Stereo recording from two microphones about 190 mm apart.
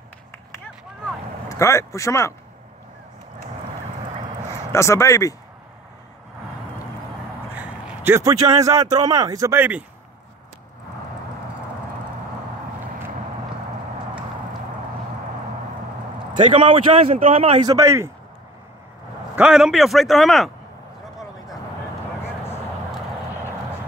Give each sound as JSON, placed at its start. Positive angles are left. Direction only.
{"t": 1.5, "sound": "speech", "side_deg": 15}
{"t": 4.7, "sound": "speech", "side_deg": 15}
{"t": 7.5, "sound": "a sound", "side_deg": -10}
{"t": 8.5, "sound": "speech", "side_deg": -15}
{"t": 16.5, "sound": "a man's voice", "side_deg": -30}
{"t": 17.6, "sound": "speech", "side_deg": -15}
{"t": 19.3, "sound": "a man's voice", "side_deg": -5}